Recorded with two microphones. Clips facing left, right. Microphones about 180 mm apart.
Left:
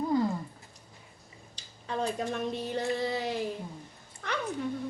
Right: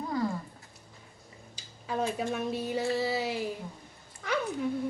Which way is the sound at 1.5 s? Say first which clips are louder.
Right 1 dB; 5° right (ahead or behind).